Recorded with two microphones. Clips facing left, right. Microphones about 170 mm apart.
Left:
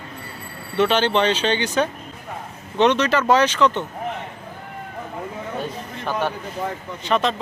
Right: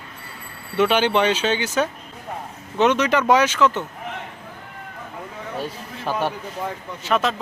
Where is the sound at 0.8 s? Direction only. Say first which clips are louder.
Even; 10° right (ahead or behind).